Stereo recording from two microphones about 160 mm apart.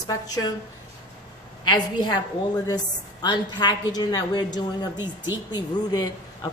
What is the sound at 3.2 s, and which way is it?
A woman's voice, 25° left (ahead or behind).